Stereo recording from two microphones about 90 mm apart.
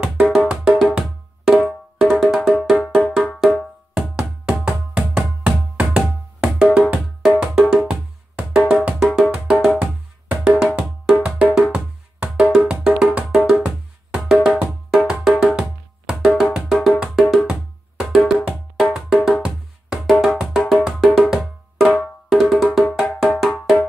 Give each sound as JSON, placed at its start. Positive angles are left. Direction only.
{"t": 0.0, "sound": "music", "side_deg": -5}
{"t": 11.2, "sound": "wood block", "side_deg": -10}
{"t": 12.4, "sound": "music", "side_deg": -5}